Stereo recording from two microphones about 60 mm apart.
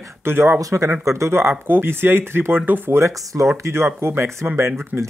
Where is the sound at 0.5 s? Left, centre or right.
Right.